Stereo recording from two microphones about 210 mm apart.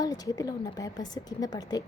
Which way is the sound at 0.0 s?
15° left (ahead or behind).